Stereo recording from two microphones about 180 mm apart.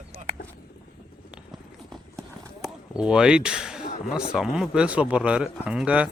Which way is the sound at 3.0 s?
5° right (ahead or behind).